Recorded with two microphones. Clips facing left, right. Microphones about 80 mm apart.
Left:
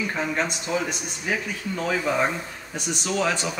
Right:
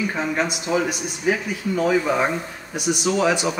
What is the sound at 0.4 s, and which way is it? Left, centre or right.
A man's voice, centre.